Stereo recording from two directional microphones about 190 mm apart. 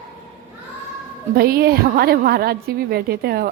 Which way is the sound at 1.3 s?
55° right (ahead or behind).